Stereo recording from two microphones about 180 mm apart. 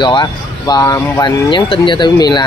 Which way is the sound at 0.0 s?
25° left (ahead or behind).